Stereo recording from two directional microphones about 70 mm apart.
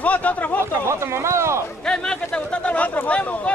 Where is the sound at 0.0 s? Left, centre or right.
Left.